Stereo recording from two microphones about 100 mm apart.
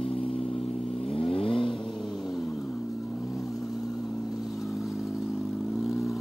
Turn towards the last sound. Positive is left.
turn(degrees=0)  # may be behind; listen again after turning